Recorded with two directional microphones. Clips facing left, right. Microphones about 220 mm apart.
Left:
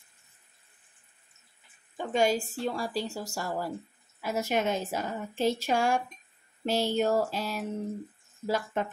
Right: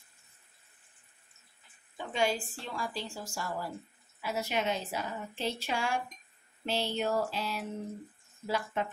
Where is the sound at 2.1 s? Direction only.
45° left (ahead or behind).